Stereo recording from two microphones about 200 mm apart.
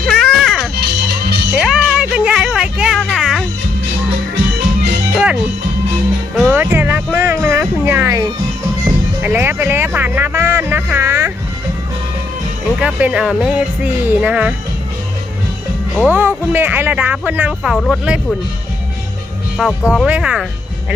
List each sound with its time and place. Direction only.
0.0 s music: centre (ahead or behind)
1.0 s music: 55° right (ahead or behind)
1.5 s a sound: 5° right (ahead or behind)
5.1 s music: 5° right (ahead or behind)
12.8 s speech: 5° right (ahead or behind)
16.0 s speech: 10° right (ahead or behind)
19.5 s speech: 5° right (ahead or behind)